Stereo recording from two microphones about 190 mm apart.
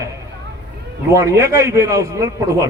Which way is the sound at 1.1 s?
15° right (ahead or behind).